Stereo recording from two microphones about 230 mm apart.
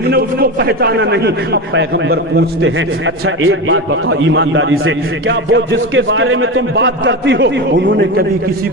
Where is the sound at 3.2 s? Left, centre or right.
Right.